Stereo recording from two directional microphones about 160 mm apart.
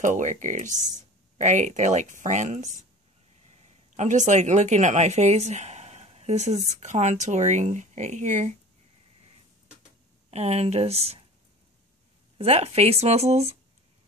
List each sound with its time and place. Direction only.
0.0 s speech: 50° right (ahead or behind)
3.9 s speech: 45° right (ahead or behind)
10.3 s speech: 40° right (ahead or behind)
12.4 s speech: 40° right (ahead or behind)